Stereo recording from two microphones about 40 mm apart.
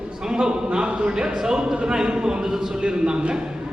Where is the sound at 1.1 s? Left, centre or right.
Centre.